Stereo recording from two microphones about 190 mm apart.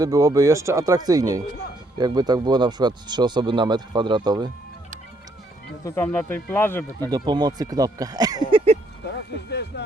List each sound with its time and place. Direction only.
0.0 s speech: 20° right (ahead or behind)
5.8 s speech: 10° left (ahead or behind)
7.1 s speech: 20° right (ahead or behind)
9.5 s speech: 60° left (ahead or behind)